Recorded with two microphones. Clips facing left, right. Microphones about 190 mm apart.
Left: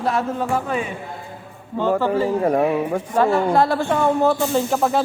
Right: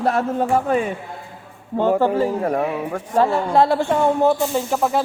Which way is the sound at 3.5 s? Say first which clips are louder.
Right 1 dB; 25° right (ahead or behind).